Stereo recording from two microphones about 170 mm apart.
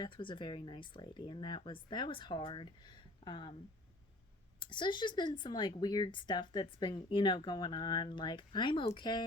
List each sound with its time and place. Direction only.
0.0 s speech: 30° left (ahead or behind)
4.6 s speech: 25° left (ahead or behind)